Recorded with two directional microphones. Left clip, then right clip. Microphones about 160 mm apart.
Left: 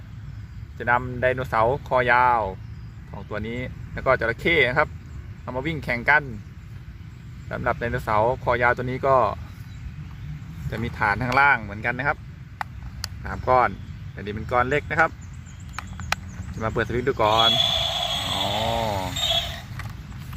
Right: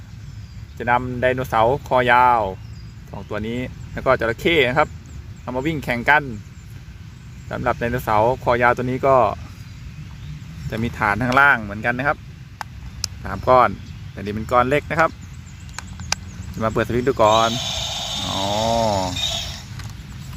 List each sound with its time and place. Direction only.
0.8 s speech: 45° right (ahead or behind)
7.4 s speech: 45° right (ahead or behind)
10.7 s speech: 50° right (ahead or behind)
13.2 s speech: 55° right (ahead or behind)
15.8 s horse: 5° left (ahead or behind)
16.6 s speech: 55° right (ahead or behind)
17.6 s a sound: 5° left (ahead or behind)
18.4 s a sound: 45° right (ahead or behind)
19.2 s vehicle: 5° left (ahead or behind)